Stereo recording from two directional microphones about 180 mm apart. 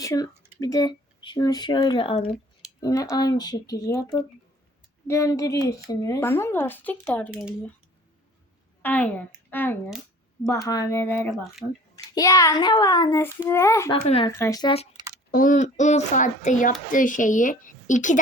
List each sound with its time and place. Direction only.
0.0 s speech: 20° left (ahead or behind)
0.6 s child singing: 20° left (ahead or behind)
2.8 s child singing: 20° left (ahead or behind)
5.0 s speech: 15° left (ahead or behind)
7.3 s speech: 5° right (ahead or behind)
8.8 s speech: 10° left (ahead or behind)
12.1 s child singing: 20° left (ahead or behind)
13.9 s speech: 30° left (ahead or behind)
14.3 s child singing: 15° left (ahead or behind)
14.9 s a sound: 20° right (ahead or behind)
15.3 s speech: 50° left (ahead or behind)